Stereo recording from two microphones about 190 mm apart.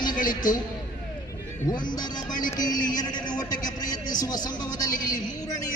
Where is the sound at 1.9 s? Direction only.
20° left (ahead or behind).